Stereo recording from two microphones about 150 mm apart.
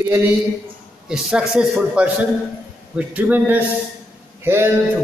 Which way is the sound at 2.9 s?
10° right (ahead or behind).